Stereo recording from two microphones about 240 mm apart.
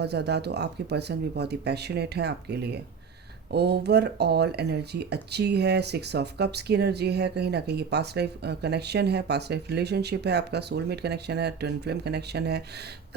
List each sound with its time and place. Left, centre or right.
0.0 s speech: right